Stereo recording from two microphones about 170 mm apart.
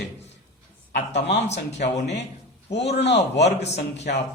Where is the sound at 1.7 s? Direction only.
90° left.